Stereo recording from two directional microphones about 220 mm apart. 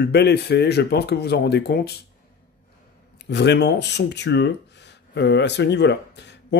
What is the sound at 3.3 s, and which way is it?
Speech, 50° left (ahead or behind).